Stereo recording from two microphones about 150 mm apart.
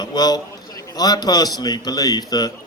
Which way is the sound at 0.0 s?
25° left (ahead or behind).